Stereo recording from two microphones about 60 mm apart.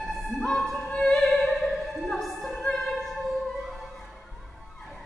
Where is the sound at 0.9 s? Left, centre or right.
Centre.